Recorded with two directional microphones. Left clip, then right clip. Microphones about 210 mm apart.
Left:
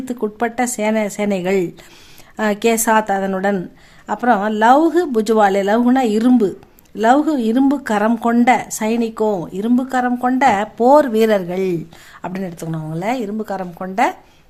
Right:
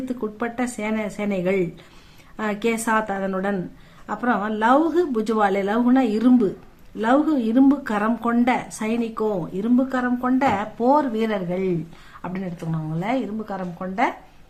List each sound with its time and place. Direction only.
0.0 s a woman's voice: 40° left (ahead or behind)